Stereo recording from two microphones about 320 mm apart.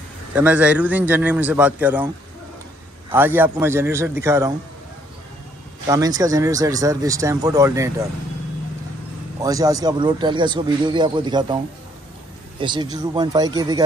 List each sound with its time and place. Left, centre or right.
0.3 s a man's voice: centre
3.1 s speech: centre
5.9 s speech: centre
9.4 s speech: centre
12.5 s speech: centre